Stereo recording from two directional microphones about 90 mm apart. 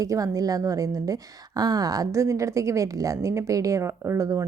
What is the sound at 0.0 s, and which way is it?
A woman's voice, 40° right (ahead or behind).